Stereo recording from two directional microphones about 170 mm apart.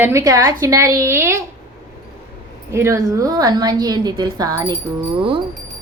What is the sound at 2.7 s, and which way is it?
A woman's voice, 15° right (ahead or behind).